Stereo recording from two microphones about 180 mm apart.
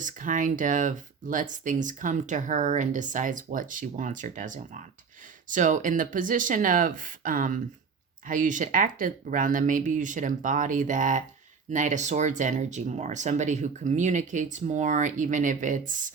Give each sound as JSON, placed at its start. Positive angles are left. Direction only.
{"t": 0.0, "sound": "speech", "side_deg": -45}